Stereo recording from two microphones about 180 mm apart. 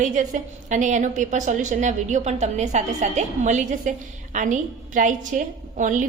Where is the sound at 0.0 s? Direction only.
45° right (ahead or behind).